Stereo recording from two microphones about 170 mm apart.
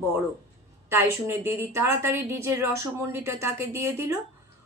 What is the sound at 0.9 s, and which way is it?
A woman's voice, 15° right (ahead or behind).